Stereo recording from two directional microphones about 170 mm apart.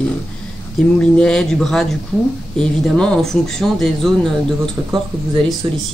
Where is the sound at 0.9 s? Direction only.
5° left (ahead or behind).